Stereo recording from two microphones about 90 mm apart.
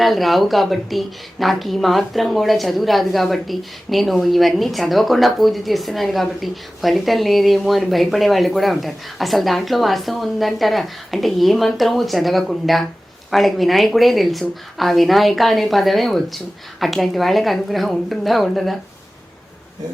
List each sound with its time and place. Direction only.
0.0 s a woman's voice: centre (ahead or behind)